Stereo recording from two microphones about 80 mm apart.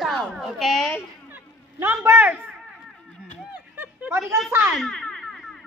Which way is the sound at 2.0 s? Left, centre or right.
Right.